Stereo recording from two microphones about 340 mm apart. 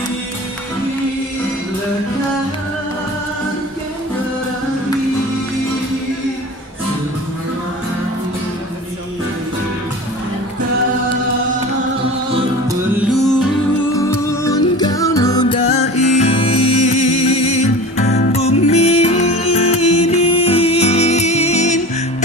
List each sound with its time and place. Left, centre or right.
13.9 s music: centre